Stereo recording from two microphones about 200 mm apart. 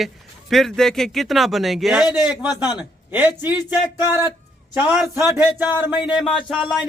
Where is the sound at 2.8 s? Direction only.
10° right (ahead or behind).